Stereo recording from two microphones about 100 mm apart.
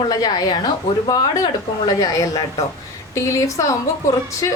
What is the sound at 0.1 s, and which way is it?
A woman's voice, 40° left (ahead or behind).